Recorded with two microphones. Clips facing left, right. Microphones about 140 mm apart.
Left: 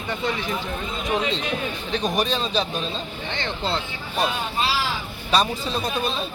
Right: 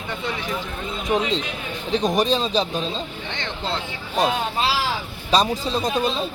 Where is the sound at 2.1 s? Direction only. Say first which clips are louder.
Right 3 dB; 30° right (ahead or behind).